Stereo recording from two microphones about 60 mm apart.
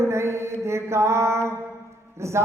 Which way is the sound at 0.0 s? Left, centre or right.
Right.